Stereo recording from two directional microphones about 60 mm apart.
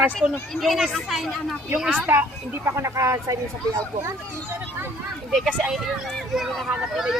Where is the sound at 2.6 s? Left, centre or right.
Right.